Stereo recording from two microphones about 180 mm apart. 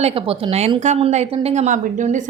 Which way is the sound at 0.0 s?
30° right (ahead or behind).